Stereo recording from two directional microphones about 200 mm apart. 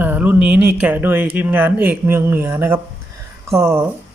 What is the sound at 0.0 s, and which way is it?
Speech, 10° right (ahead or behind).